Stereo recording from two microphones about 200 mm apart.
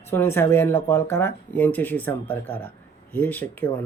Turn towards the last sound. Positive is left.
turn(degrees=10)  # may be behind; listen again after turning